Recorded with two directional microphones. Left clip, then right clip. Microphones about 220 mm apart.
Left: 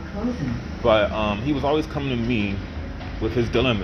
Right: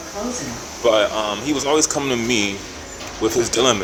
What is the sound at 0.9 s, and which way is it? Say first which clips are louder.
Speech: right 3 dB; 35° right (ahead or behind).